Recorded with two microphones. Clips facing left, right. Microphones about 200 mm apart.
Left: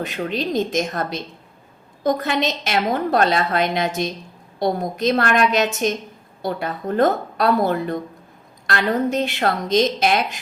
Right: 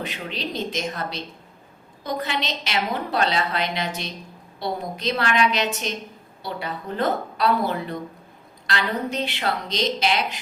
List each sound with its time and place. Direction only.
0.0 s a woman's voice: 45° left (ahead or behind)